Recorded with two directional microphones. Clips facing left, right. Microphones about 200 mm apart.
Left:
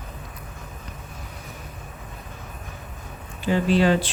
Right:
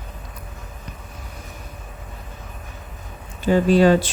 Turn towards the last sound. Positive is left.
turn(degrees=-45)  # may be behind; listen again after turning